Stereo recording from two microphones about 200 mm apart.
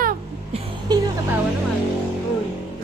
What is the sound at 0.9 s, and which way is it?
Music, 20° right (ahead or behind).